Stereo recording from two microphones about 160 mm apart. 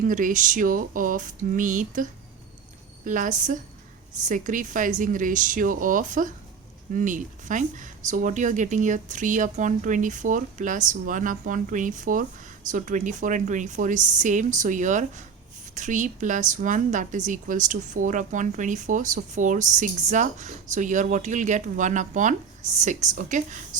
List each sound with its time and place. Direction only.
0.0 s a woman's voice: 55° right (ahead or behind)